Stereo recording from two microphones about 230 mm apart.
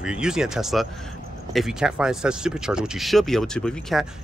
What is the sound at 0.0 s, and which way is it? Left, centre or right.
Speech, centre.